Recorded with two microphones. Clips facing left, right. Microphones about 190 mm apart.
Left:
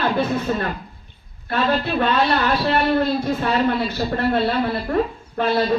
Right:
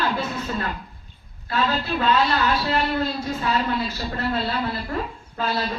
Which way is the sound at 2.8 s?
55° left (ahead or behind).